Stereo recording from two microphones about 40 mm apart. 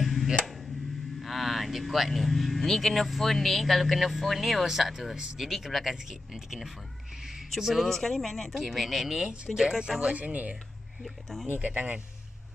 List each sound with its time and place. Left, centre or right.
0.0 s a sound: centre
1.2 s speech: centre
5.1 s speech: centre
5.4 s speech: centre
7.9 s speech: centre
9.8 s speech: centre
10.1 s speech: right
11.0 s speech: centre
11.4 s speech: right